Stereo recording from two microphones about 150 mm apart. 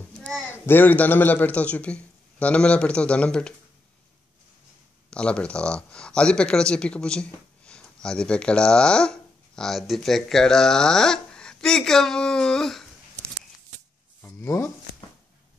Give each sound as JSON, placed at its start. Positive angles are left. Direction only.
{"t": 0.2, "sound": "a man's voice", "side_deg": 10}
{"t": 5.1, "sound": "speech", "side_deg": 5}
{"t": 14.2, "sound": "a sound", "side_deg": 20}